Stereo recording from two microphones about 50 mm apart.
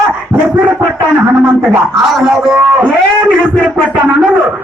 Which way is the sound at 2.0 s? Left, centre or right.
Centre.